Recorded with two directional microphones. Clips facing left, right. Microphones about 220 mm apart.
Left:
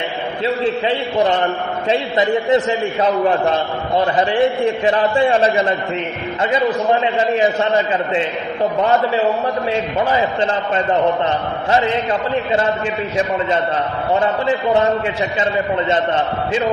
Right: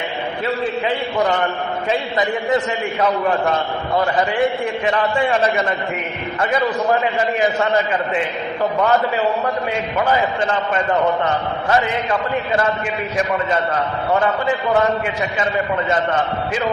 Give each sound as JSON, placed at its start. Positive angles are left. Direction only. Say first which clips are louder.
{"t": 2.5, "sound": "a man's voice", "louder": "left 4 dB", "side_deg": 30}
{"t": 11.7, "sound": "a man's voice", "louder": "left 2 dB", "side_deg": 25}